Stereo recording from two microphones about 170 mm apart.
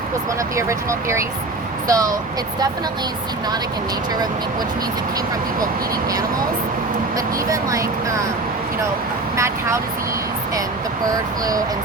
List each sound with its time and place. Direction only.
0.5 s speech: 15° right (ahead or behind)
7.5 s speech: 20° right (ahead or behind)
11.1 s speech: 20° right (ahead or behind)